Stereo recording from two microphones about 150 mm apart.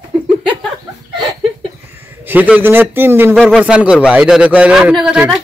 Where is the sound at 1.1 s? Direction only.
30° right (ahead or behind).